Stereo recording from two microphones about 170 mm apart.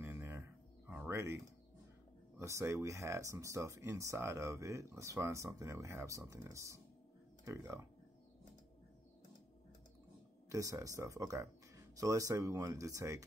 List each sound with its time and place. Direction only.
0.0 s a sound: 15° right (ahead or behind)
2.3 s speech: 15° right (ahead or behind)
10.5 s speech: 20° right (ahead or behind)